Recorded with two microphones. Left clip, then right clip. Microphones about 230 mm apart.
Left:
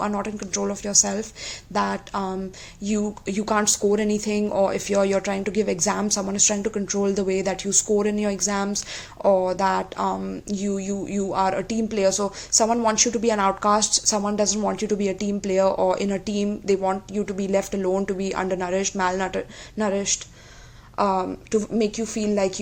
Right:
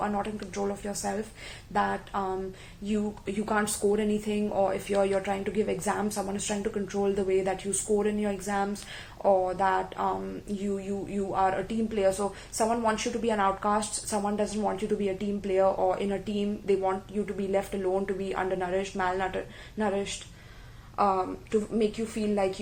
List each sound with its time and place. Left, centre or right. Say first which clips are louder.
0.0 s a woman's voice: left 4 dB; left